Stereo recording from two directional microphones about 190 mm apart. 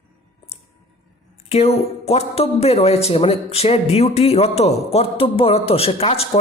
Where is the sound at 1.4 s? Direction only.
35° left (ahead or behind).